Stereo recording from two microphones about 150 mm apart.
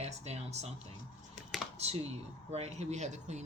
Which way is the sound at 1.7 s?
45° right (ahead or behind).